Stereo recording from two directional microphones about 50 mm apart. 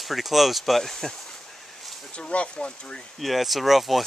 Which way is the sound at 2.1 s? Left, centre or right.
Left.